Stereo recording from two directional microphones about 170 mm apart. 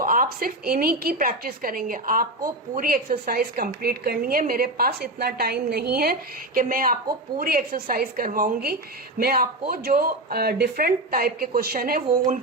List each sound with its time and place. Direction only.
0.0 s a woman's voice: 55° right (ahead or behind)